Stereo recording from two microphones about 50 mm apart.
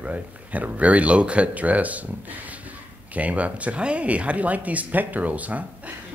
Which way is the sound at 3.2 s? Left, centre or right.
Right.